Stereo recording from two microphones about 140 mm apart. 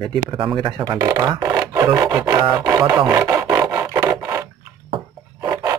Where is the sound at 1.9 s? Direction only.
20° right (ahead or behind).